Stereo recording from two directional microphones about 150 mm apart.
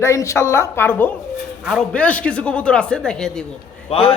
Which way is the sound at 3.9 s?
40° left (ahead or behind).